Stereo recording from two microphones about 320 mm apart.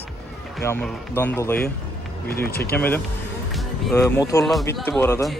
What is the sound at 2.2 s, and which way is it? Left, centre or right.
Speech, left.